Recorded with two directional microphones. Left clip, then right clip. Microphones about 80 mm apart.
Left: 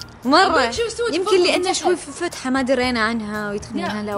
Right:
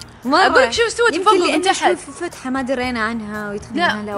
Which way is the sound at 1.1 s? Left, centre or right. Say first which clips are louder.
Right 2 dB; centre.